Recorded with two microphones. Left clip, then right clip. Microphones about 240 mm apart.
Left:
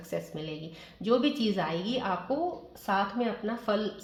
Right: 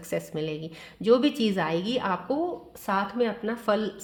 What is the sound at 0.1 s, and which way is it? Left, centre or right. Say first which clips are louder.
Speech: right 6 dB; right.